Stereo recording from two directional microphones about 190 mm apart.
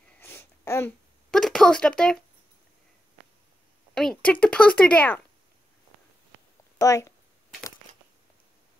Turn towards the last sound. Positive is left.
turn(degrees=15)  # may be behind; listen again after turning